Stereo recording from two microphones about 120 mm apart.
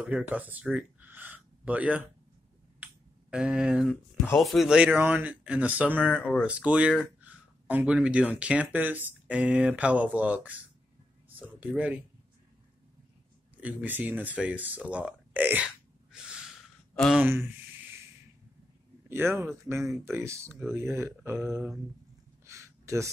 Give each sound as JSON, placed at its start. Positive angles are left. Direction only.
{"t": 0.3, "sound": "speech", "side_deg": -15}
{"t": 2.8, "sound": "finger snapping", "side_deg": -5}
{"t": 3.9, "sound": "speech", "side_deg": 10}
{"t": 13.6, "sound": "speech", "side_deg": -10}
{"t": 16.9, "sound": "speech", "side_deg": 5}
{"t": 17.2, "sound": "a sound", "side_deg": -20}
{"t": 19.0, "sound": "speech", "side_deg": -20}
{"t": 22.5, "sound": "a sound", "side_deg": -25}